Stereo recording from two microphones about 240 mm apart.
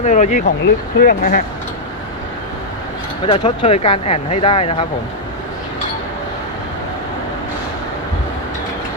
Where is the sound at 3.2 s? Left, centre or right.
Left.